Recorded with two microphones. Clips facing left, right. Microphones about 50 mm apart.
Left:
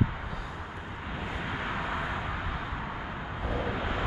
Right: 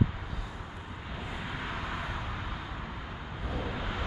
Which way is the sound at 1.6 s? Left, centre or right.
Centre.